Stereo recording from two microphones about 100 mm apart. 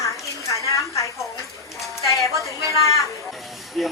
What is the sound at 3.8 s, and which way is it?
Speech, centre (ahead or behind).